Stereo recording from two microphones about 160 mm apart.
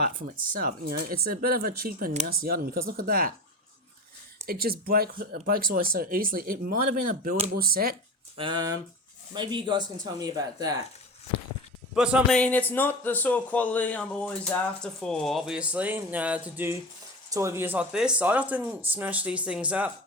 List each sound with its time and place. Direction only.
0.2 s speech: 65° right (ahead or behind)
4.4 s speech: 70° right (ahead or behind)
8.4 s speech: 30° right (ahead or behind)
11.9 s speech: 5° right (ahead or behind)
12.3 s a man's voice: 10° left (ahead or behind); by 19.9 s 10° right (ahead or behind)